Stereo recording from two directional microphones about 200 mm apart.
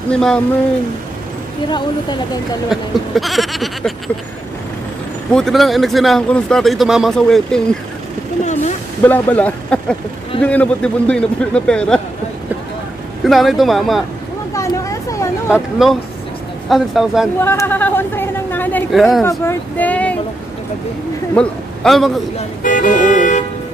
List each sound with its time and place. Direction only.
0.1 s speech: 5° left (ahead or behind)
1.7 s speech: 20° left (ahead or behind)
2.7 s speech: centre (ahead or behind)
5.3 s speech: centre (ahead or behind)
9.0 s speech: 10° left (ahead or behind)
13.2 s speech: centre (ahead or behind)
14.5 s speech: 15° left (ahead or behind)
15.5 s speech: centre (ahead or behind)
17.4 s a sound: 10° left (ahead or behind)
18.9 s speech: centre (ahead or behind)
19.2 s speech: 10° left (ahead or behind)
21.4 s a man's voice: centre (ahead or behind)
22.6 s music: 40° left (ahead or behind)